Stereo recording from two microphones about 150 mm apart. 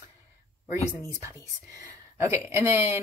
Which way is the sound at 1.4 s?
20° right (ahead or behind).